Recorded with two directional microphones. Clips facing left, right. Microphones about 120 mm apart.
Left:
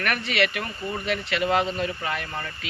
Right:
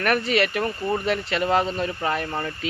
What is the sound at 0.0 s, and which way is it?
Speech, 35° right (ahead or behind).